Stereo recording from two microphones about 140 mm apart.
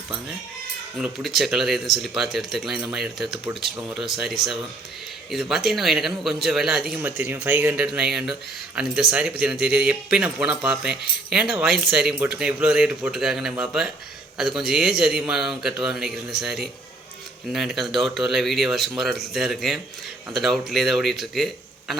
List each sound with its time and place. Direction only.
0.9 s speech: 5° right (ahead or behind)
7.0 s speech: 15° right (ahead or behind)